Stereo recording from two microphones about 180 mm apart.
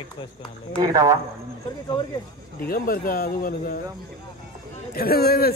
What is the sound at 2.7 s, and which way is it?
Speech, 50° left (ahead or behind).